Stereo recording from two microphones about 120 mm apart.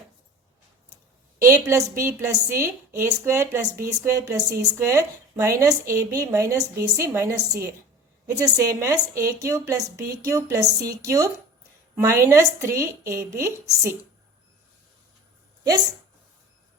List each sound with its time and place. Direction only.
1.5 s a woman's voice: 25° right (ahead or behind)